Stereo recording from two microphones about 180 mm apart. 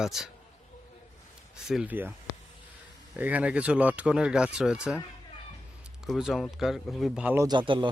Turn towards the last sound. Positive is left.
turn(degrees=-25)  # may be behind; listen again after turning